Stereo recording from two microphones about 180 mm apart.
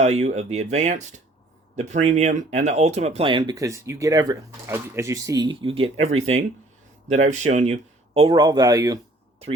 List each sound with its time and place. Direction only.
0.0 s speech: 35° right (ahead or behind); by 9.0 s 20° right (ahead or behind)